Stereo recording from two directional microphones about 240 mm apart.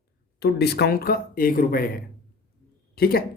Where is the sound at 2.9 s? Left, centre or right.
Left.